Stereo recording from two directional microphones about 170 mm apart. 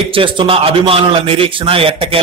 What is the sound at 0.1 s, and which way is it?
A man's voice, 30° right (ahead or behind).